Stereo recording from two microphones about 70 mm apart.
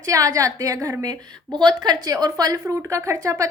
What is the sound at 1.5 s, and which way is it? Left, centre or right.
A woman's voice, right.